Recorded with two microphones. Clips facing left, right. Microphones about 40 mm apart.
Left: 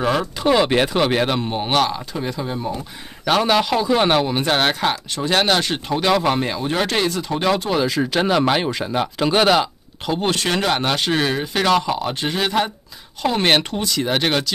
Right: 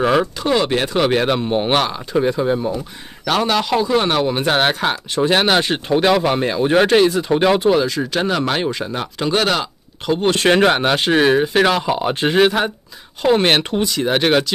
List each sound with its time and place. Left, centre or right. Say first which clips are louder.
0.0 s speech: right 4 dB; centre
0.4 s speech: left 1 dB; centre
0.9 s speech: right 2 dB; centre
1.5 s speech: right 2 dB; centre
3.3 s speech: even; centre
4.9 s speech: right 3 dB; centre
6.6 s speech: right 7 dB; right
6.9 s speech: right 7 dB; centre
7.7 s speech: right 1 dB; centre
10.7 s speech: right 4 dB; centre
13.2 s speech: right 3 dB; centre